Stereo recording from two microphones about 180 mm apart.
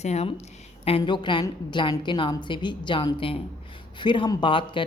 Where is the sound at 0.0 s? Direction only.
35° left (ahead or behind).